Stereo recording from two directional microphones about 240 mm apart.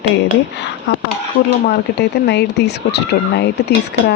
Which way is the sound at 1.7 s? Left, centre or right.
Left.